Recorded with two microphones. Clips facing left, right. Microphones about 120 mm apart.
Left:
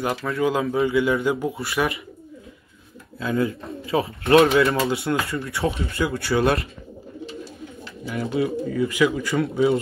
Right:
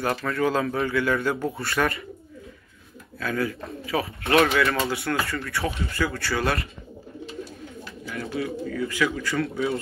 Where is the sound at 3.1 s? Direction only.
20° left (ahead or behind).